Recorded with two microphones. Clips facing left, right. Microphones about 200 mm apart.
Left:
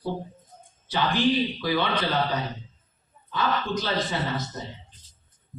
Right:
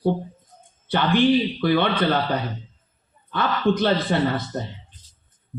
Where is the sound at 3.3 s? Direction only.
60° right (ahead or behind).